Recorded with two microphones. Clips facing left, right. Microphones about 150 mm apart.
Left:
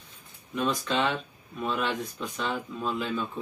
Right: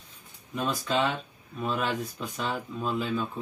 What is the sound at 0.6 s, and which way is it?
Mantra, centre (ahead or behind).